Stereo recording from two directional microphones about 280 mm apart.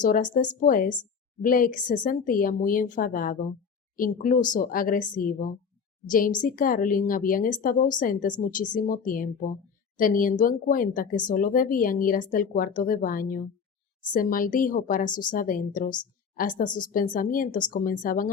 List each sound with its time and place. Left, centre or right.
0.0 s speech: left